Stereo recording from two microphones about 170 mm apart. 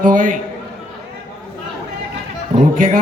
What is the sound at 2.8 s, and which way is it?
Speech, 55° right (ahead or behind).